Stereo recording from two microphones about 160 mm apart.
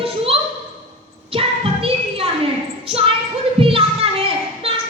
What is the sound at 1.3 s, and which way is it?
Child singing, 35° right (ahead or behind).